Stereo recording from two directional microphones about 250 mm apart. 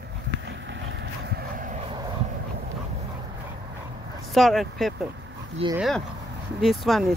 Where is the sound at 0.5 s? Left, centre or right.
Right.